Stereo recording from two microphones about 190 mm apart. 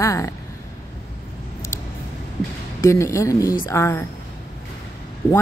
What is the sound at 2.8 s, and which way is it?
Speech, 15° left (ahead or behind).